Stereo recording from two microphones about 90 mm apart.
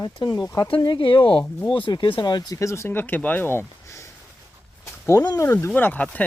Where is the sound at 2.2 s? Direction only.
50° left (ahead or behind).